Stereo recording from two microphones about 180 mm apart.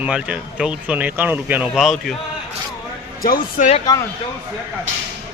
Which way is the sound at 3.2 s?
50° left (ahead or behind).